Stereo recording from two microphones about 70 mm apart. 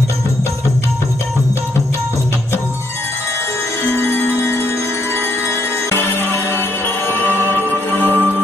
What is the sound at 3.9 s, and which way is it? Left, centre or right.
Music, left.